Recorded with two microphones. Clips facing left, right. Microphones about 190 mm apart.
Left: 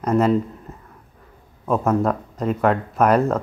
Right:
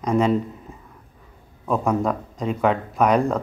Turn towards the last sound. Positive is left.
turn(degrees=5)  # may be behind; listen again after turning